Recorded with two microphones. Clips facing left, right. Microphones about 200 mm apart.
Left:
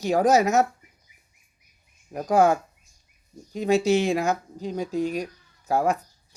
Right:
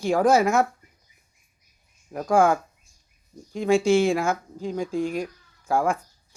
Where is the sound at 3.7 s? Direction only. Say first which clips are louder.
Right 1 dB; 40° left (ahead or behind).